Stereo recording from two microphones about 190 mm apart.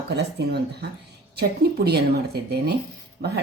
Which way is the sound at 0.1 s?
60° right (ahead or behind).